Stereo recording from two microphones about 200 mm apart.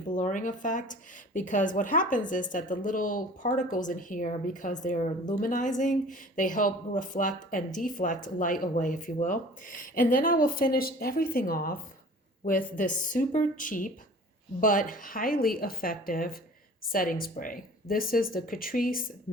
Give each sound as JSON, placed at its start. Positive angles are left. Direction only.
{"t": 0.1, "sound": "speech", "side_deg": 40}